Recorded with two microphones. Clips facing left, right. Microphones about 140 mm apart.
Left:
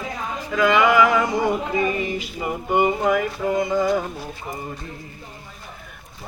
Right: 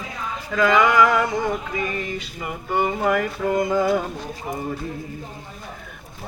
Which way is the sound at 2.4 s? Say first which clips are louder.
Left 3 dB; 15° left (ahead or behind).